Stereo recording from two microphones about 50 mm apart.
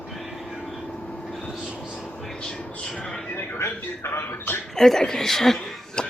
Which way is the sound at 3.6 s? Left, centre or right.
Left.